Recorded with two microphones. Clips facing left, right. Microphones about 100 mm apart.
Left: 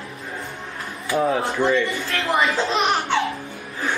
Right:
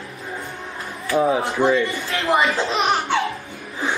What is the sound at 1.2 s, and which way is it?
Speech, 5° right (ahead or behind).